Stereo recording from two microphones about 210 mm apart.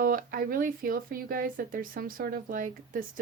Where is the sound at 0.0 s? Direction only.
40° right (ahead or behind).